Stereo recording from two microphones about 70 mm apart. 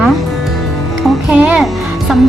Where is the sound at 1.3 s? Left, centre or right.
Right.